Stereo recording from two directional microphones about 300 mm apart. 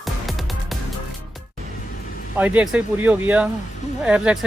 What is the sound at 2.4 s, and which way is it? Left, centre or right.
Speech, centre.